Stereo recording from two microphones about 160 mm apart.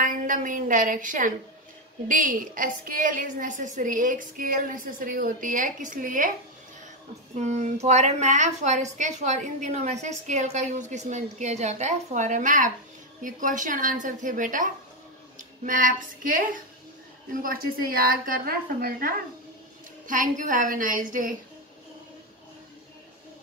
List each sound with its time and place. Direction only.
0.0 s a woman's voice: 55° right (ahead or behind)
7.3 s a woman's voice: 45° right (ahead or behind); by 19.1 s 65° right (ahead or behind)
20.1 s a woman's voice: 55° right (ahead or behind)